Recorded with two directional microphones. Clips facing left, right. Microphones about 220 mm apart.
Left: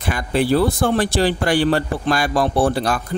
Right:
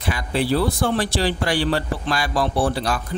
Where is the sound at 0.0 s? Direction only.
50° left (ahead or behind).